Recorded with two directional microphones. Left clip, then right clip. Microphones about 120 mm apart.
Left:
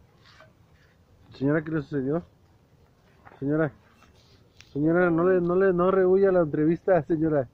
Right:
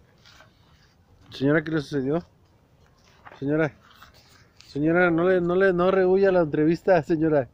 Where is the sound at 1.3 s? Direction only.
30° right (ahead or behind).